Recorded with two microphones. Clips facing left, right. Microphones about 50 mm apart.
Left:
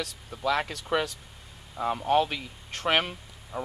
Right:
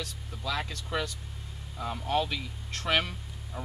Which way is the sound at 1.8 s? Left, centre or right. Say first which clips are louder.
Left 6 dB; left.